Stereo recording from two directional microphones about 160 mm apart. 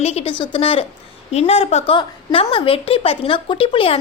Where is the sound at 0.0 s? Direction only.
40° left (ahead or behind).